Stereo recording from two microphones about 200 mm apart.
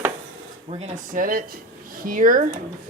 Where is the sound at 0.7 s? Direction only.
35° right (ahead or behind).